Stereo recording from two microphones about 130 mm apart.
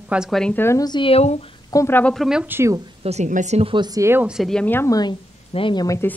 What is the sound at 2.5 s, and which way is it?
Speech, 20° right (ahead or behind).